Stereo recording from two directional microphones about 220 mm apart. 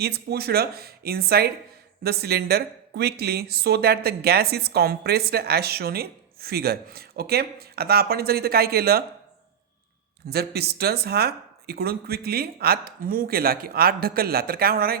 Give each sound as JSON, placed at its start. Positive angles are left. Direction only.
{"t": 0.0, "sound": "speech", "side_deg": -45}
{"t": 10.2, "sound": "speech", "side_deg": -45}